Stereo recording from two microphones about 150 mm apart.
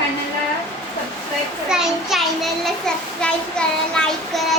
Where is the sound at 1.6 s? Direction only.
5° right (ahead or behind).